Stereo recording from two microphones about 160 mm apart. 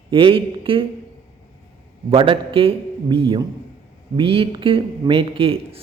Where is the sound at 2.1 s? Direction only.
35° right (ahead or behind).